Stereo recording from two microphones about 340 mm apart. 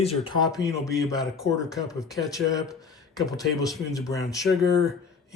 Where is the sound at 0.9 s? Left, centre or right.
Centre.